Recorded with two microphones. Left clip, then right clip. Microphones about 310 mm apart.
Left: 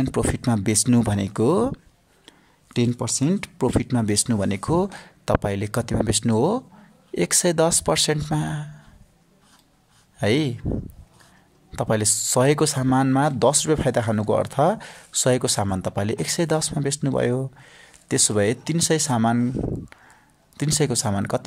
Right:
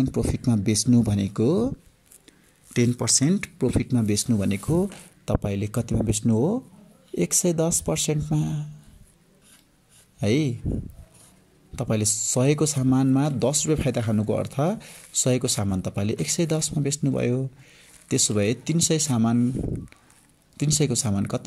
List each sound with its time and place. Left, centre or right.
0.0 s speech: left
0.4 s speech: left
1.1 s speech: left
2.2 s a sound: centre
3.8 s speech: left
10.1 s speech: left
11.7 s speech: left
20.5 s speech: left